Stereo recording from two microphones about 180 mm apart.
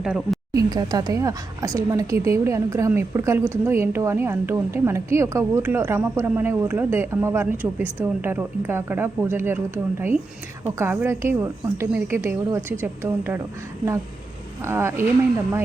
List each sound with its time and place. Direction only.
0.0 s speech: centre (ahead or behind)
0.5 s a woman's voice: 20° right (ahead or behind)
14.6 s a woman's voice: 15° right (ahead or behind)